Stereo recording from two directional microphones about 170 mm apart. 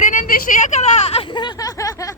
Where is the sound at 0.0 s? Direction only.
50° left (ahead or behind).